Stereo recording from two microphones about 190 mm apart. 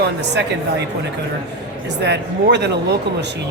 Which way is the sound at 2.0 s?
65° right (ahead or behind).